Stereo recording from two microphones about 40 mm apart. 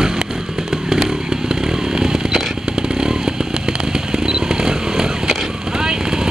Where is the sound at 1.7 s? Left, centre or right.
Centre.